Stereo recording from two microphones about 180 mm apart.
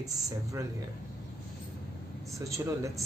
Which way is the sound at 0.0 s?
20° right (ahead or behind).